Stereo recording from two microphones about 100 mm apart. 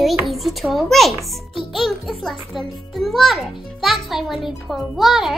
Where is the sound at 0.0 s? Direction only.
Centre (ahead or behind).